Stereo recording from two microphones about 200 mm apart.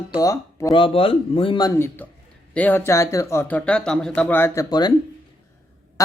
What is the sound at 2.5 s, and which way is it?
Speech, 10° left (ahead or behind).